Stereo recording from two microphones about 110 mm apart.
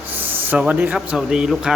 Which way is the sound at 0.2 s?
15° right (ahead or behind).